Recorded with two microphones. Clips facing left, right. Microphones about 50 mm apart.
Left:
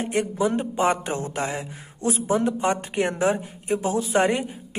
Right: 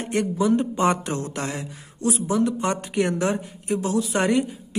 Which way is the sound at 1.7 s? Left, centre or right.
Left.